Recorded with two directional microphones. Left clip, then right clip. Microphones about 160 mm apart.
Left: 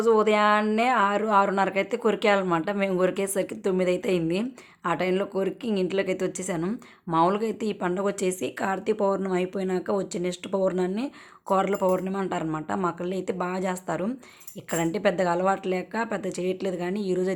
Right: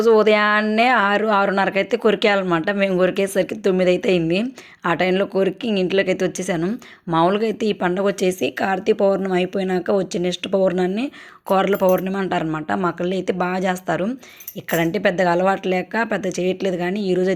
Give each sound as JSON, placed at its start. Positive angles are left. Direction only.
{"t": 0.0, "sound": "speech", "side_deg": -20}